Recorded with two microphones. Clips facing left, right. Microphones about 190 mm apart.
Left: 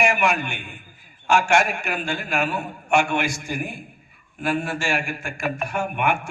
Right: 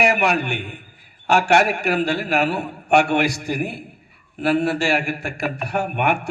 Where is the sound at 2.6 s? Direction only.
65° right (ahead or behind).